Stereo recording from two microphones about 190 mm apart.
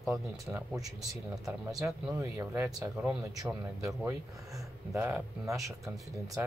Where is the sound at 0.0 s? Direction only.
5° right (ahead or behind).